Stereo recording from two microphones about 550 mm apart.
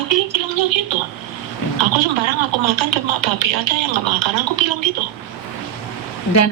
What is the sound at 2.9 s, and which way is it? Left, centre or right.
Speech, right.